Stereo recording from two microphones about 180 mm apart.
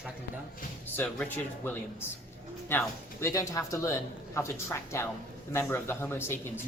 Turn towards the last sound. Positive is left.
turn(degrees=15)  # may be behind; listen again after turning